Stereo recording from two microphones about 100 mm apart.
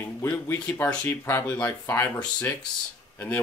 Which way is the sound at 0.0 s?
25° left (ahead or behind).